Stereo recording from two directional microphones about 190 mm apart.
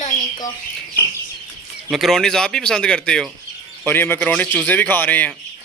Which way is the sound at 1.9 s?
Centre (ahead or behind).